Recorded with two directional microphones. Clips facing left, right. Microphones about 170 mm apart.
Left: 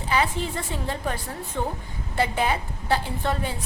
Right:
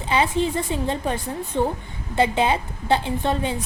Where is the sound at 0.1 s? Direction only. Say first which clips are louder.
Right 4 dB; 20° right (ahead or behind).